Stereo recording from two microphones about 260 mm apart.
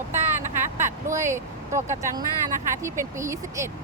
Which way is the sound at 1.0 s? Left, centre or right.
Centre.